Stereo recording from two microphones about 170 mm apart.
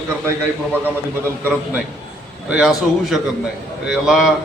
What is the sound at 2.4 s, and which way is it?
Speech, 5° right (ahead or behind).